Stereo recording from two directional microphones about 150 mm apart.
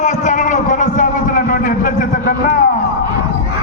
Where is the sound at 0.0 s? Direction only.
50° left (ahead or behind).